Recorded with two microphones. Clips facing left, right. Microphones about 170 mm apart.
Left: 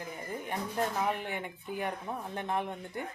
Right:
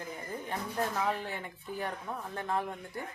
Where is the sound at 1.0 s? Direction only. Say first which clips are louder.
Left 1 dB; 15° left (ahead or behind).